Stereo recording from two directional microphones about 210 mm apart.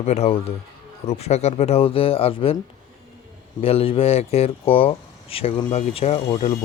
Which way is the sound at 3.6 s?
25° left (ahead or behind).